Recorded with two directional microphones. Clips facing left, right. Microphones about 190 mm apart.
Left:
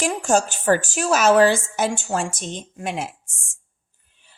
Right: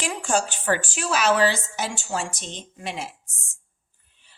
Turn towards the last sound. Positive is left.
turn(degrees=50)  # may be behind; listen again after turning